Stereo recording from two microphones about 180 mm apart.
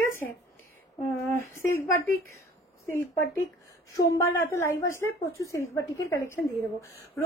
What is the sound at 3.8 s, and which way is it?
A woman's voice, 15° left (ahead or behind).